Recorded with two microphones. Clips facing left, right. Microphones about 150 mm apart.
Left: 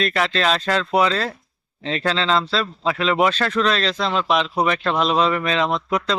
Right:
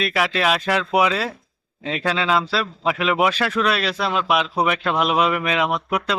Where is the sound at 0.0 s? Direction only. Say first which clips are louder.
Even; 10° right (ahead or behind).